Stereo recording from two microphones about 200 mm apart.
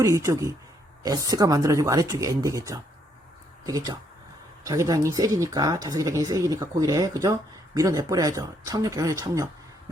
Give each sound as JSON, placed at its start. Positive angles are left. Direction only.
{"t": 0.0, "sound": "speech", "side_deg": -15}